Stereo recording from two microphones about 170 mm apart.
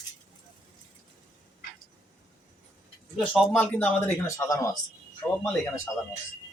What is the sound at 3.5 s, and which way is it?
Speech, 15° left (ahead or behind).